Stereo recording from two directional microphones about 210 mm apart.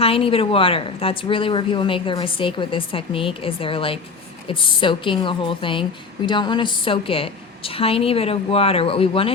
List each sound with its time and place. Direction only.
0.0 s a woman's voice: 25° left (ahead or behind)